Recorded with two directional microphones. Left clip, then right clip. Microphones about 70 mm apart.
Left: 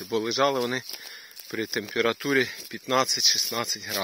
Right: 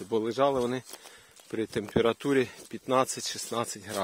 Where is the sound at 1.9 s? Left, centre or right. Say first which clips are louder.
Even; right.